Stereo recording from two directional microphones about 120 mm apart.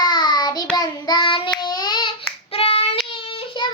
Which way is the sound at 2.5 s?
50° left (ahead or behind).